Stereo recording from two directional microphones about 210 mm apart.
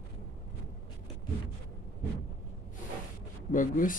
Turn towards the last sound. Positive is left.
turn(degrees=40)  # may be behind; listen again after turning